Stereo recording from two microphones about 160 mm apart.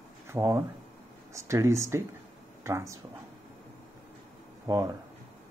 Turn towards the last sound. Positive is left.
turn(degrees=-20)  # may be behind; listen again after turning